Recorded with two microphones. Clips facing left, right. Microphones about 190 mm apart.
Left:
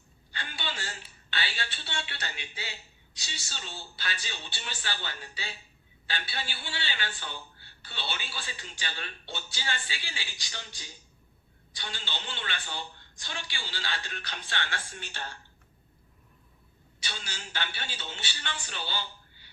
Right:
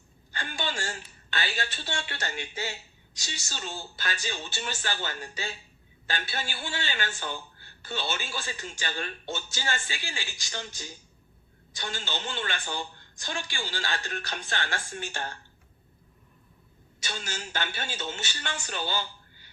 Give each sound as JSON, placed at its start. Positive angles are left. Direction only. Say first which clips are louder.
{"t": 0.3, "sound": "a woman's voice", "louder": "right 5 dB", "side_deg": -45}
{"t": 17.0, "sound": "a man's voice", "louder": "right 5 dB", "side_deg": -45}